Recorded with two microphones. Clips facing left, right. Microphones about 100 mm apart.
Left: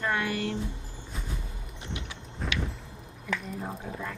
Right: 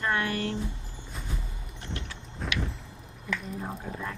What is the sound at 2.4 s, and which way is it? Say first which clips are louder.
Vehicle: even; centre (ahead or behind).